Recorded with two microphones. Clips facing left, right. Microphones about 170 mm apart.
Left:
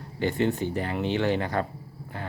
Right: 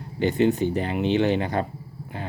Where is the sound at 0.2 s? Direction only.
20° right (ahead or behind).